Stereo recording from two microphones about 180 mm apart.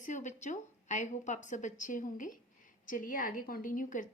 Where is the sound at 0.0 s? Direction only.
40° left (ahead or behind).